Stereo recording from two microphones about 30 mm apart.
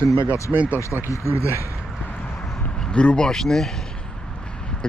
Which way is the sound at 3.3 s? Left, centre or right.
Centre.